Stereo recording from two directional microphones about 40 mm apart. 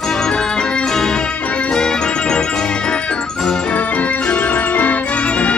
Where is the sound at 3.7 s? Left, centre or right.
Left.